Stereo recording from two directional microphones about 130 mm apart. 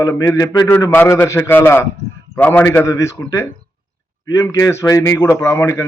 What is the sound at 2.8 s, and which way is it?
A man's voice, 25° left (ahead or behind).